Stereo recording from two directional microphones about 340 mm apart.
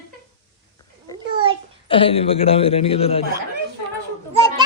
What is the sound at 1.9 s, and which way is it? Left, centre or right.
A man's voice, centre.